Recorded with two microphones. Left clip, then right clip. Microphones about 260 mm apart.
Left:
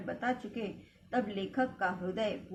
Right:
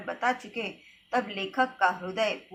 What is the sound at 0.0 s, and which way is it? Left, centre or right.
A woman's voice, right.